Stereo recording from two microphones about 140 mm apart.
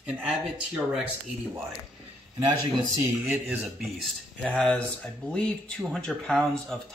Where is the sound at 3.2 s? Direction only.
10° right (ahead or behind).